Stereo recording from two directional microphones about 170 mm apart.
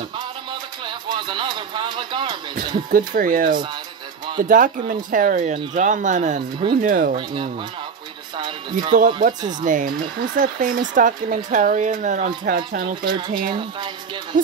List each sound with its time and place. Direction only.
0.8 s speech: 25° right (ahead or behind)
2.9 s speech: 50° right (ahead or behind)
8.9 s speech: 50° right (ahead or behind)
9.4 s speech: 25° right (ahead or behind)
9.7 s speech: 50° right (ahead or behind)
12.8 s speech: 25° right (ahead or behind)